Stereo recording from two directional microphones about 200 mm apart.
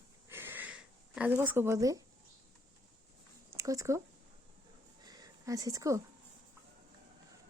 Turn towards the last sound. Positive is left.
turn(degrees=-15)  # may be behind; listen again after turning